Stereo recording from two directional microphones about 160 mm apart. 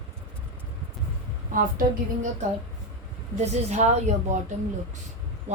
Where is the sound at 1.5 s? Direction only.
60° right (ahead or behind).